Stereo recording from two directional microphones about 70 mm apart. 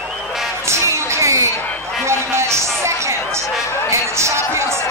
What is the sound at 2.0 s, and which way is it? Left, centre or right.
Music, right.